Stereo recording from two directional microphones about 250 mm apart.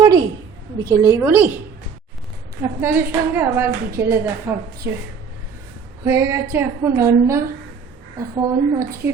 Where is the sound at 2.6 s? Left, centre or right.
Centre.